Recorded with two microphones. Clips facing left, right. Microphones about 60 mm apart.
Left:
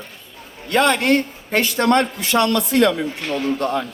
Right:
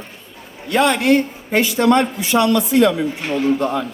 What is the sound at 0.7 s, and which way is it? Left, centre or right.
A man's voice, left.